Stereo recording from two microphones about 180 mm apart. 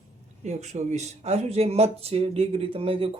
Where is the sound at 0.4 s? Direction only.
40° right (ahead or behind).